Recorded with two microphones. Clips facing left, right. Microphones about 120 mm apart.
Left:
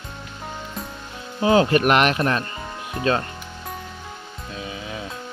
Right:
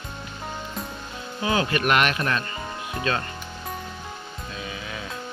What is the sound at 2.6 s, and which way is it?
Cricket, centre (ahead or behind).